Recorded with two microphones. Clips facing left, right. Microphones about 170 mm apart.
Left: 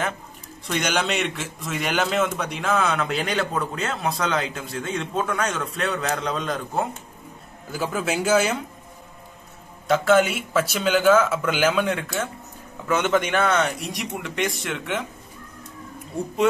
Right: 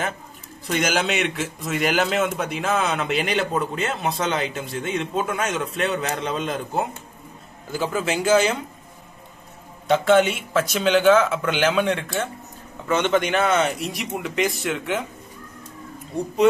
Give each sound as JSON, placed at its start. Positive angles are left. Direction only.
{"t": 0.7, "sound": "a man's voice", "side_deg": 0}
{"t": 9.8, "sound": "a man's voice", "side_deg": 0}
{"t": 16.1, "sound": "a man's voice", "side_deg": 0}